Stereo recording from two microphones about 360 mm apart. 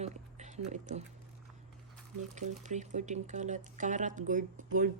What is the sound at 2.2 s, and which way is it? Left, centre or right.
Speech, centre.